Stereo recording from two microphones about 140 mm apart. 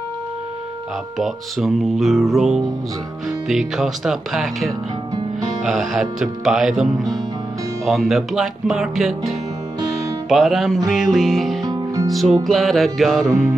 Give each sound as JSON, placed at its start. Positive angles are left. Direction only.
{"t": 1.1, "sound": "speech", "side_deg": 0}
{"t": 10.3, "sound": "speech", "side_deg": 0}
{"t": 11.6, "sound": "music", "side_deg": -25}
{"t": 12.4, "sound": "speech", "side_deg": 0}